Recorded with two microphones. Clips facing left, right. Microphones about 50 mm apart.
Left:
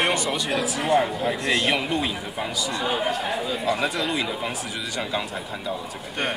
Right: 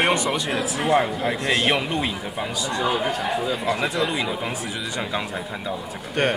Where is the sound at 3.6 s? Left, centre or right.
Right.